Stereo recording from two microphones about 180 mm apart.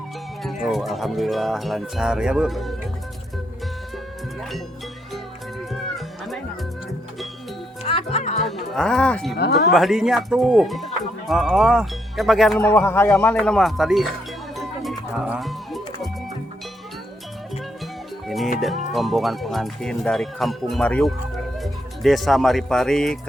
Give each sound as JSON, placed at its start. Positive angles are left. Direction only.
{"t": 0.4, "sound": "speech", "side_deg": 0}
{"t": 5.1, "sound": "music", "side_deg": 0}
{"t": 7.9, "sound": "music", "side_deg": 35}
{"t": 8.4, "sound": "speech", "side_deg": 0}
{"t": 9.3, "sound": "speech", "side_deg": 65}
{"t": 9.6, "sound": "speech", "side_deg": 0}
{"t": 12.6, "sound": "speech", "side_deg": 15}
{"t": 14.5, "sound": "music", "side_deg": 0}
{"t": 18.3, "sound": "music", "side_deg": 0}
{"t": 18.9, "sound": "speech", "side_deg": 0}